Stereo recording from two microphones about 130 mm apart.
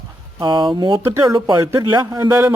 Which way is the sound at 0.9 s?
20° right (ahead or behind).